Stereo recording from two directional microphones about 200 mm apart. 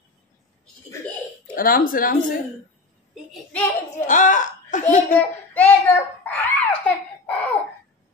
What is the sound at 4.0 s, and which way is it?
Speech, 40° left (ahead or behind).